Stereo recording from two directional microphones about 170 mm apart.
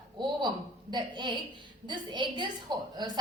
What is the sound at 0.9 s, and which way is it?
A woman's voice, 25° right (ahead or behind).